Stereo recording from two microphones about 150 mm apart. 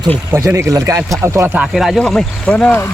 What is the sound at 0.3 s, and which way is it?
Speech, 20° right (ahead or behind).